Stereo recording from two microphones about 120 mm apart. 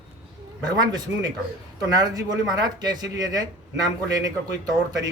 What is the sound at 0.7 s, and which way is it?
Speech, 35° right (ahead or behind).